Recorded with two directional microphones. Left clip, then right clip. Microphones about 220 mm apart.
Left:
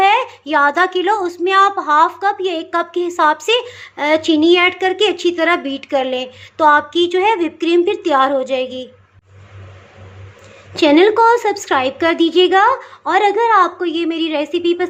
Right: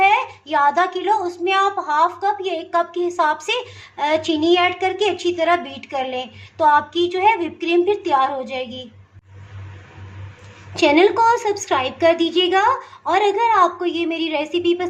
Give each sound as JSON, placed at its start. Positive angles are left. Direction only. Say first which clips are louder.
{"t": 0.0, "sound": "a woman's voice", "louder": "left 3 dB", "side_deg": 30}
{"t": 10.8, "sound": "a woman's voice", "louder": "left 4 dB", "side_deg": 30}